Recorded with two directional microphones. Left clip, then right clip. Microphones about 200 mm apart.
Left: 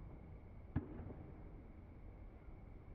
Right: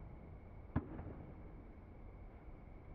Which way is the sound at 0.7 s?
20° right (ahead or behind).